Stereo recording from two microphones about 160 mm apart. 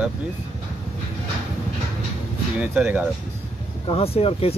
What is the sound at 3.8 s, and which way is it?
Speech, 35° left (ahead or behind).